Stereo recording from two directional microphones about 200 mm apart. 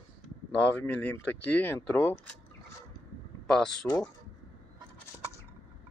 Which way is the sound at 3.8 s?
15° left (ahead or behind).